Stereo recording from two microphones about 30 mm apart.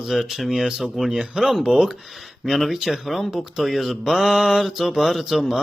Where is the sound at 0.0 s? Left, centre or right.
Centre.